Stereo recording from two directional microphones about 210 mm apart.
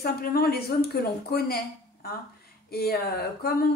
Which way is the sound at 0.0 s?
50° left (ahead or behind).